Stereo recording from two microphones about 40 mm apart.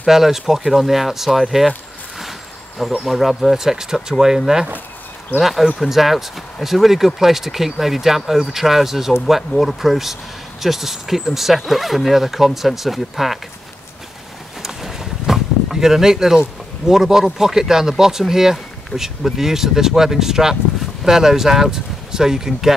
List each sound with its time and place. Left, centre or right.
0.0 s speech: centre
3.0 s speech: centre
5.4 s speech: centre
14.6 s a sound: centre
16.8 s speech: centre